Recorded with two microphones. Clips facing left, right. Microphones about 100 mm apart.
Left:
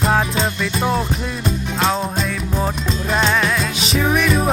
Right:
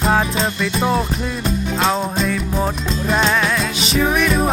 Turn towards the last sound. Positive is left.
turn(degrees=0)  # may be behind; listen again after turning